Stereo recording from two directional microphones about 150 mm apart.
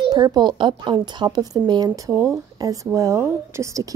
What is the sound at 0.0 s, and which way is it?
A child's voice, 30° right (ahead or behind).